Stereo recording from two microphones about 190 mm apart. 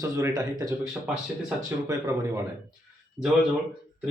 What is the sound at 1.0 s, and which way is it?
Speech, 5° right (ahead or behind).